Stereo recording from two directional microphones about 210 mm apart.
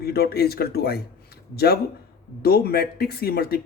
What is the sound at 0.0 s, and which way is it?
Speech, 45° left (ahead or behind).